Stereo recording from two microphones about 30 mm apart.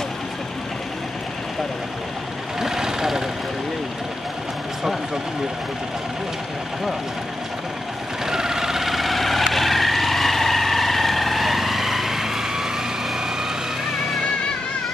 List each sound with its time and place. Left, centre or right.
2.6 s vehicle: centre
8.3 s vehicle: centre